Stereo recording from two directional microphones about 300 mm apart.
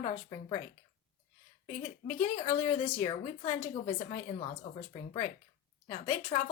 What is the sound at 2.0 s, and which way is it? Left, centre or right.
A woman's voice, left.